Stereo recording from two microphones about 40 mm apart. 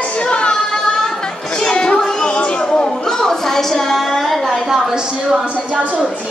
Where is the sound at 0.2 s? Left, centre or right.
Left.